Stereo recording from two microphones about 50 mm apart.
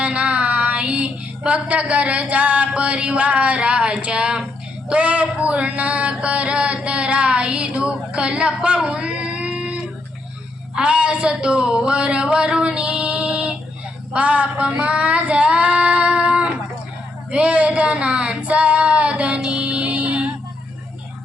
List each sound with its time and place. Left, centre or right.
0.0 s female singing: right
4.0 s a sound: centre
10.8 s speech: right
14.1 s female singing: right
17.3 s a sound: right
19.5 s music: right